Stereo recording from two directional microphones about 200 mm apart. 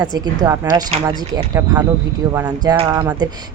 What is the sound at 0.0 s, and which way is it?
Speech, 20° right (ahead or behind).